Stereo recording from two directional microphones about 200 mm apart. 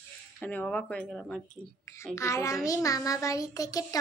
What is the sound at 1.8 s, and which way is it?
A child's voice, 15° left (ahead or behind).